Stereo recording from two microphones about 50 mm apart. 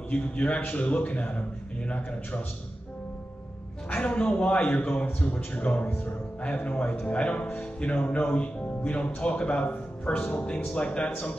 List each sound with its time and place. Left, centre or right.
0.1 s speech: left
3.9 s speech: left